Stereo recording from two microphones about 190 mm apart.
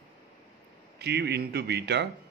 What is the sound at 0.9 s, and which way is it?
A man's voice, 60° right (ahead or behind).